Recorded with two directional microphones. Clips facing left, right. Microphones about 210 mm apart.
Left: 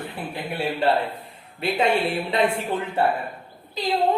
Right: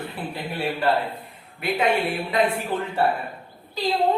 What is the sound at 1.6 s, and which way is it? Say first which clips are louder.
Speech: left 1 dB; 30° left (ahead or behind).